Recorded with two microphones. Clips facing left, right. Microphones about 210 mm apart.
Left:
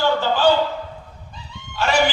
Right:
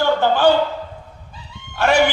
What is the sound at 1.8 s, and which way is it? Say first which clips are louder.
Chicken: right 5 dB; 55° right (ahead or behind).